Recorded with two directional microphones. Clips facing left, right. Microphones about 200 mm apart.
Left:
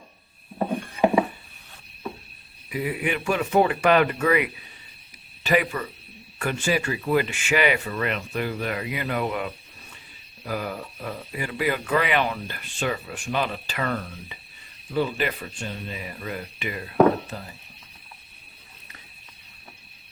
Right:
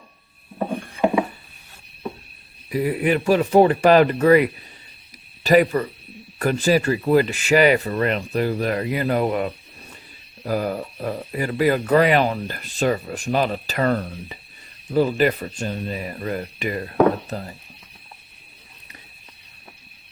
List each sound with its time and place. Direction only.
2.6 s speech: 40° right (ahead or behind)